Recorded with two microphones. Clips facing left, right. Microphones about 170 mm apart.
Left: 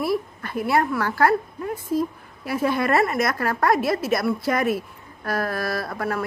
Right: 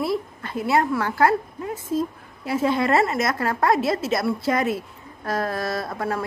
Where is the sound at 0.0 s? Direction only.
25° right (ahead or behind).